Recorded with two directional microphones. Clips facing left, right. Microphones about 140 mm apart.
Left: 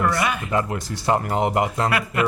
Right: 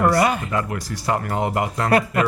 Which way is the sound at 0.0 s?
30° right (ahead or behind).